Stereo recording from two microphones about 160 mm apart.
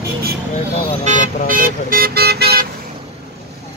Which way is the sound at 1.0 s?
50° right (ahead or behind).